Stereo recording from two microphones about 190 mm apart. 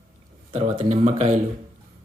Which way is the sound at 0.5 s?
40° right (ahead or behind).